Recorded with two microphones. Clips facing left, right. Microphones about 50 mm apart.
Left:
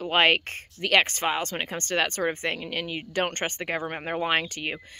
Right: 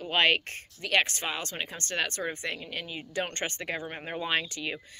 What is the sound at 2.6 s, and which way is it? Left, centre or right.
Speech, left.